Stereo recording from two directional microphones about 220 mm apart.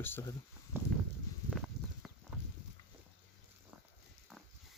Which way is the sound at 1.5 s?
Centre (ahead or behind).